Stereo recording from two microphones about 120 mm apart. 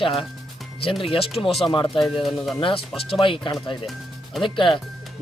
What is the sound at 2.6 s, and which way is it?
Speech, 50° left (ahead or behind).